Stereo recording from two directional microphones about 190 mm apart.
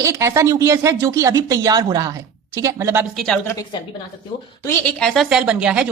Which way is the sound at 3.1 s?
5° left (ahead or behind).